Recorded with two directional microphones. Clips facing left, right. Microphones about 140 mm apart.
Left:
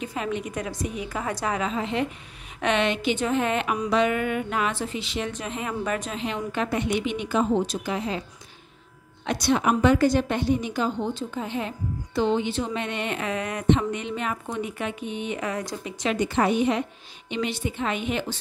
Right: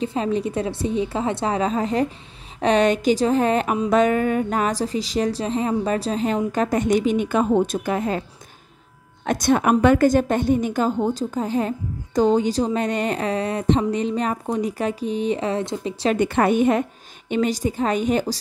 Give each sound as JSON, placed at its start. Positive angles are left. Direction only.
{"t": 0.0, "sound": "a woman's voice", "side_deg": -30}
{"t": 9.2, "sound": "a woman's voice", "side_deg": -50}
{"t": 16.2, "sound": "a woman's voice", "side_deg": -55}